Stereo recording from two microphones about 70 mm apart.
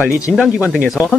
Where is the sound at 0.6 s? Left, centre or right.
Right.